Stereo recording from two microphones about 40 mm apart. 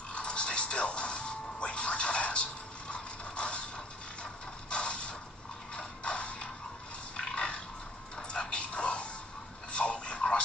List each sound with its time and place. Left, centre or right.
0.1 s music: left
2.9 s mechanisms: left
5.8 s music: left
7.2 s dog: left
8.2 s music: left
9.7 s a sound: left